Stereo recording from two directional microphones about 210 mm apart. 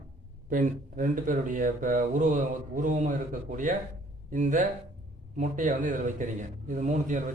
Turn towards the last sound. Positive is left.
turn(degrees=-35)  # may be behind; listen again after turning